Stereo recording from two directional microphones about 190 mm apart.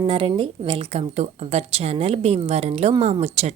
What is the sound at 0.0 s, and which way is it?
A woman's voice, 25° right (ahead or behind).